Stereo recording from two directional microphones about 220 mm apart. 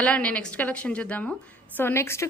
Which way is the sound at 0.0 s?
5° left (ahead or behind).